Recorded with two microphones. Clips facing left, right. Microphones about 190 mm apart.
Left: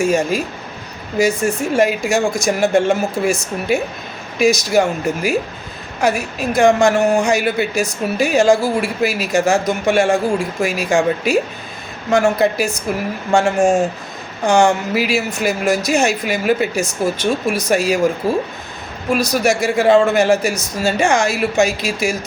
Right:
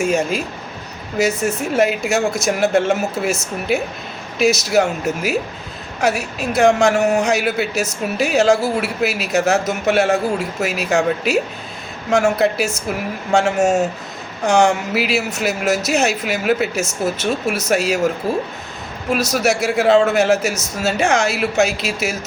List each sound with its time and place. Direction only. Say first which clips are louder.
0.0 s speech: left 2 dB; 5° right (ahead or behind)
15.1 s speech: left 2 dB; 5° right (ahead or behind)
19.1 s speech: left 2 dB; 5° right (ahead or behind)